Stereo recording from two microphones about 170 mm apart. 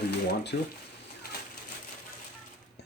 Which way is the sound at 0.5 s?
65° left (ahead or behind).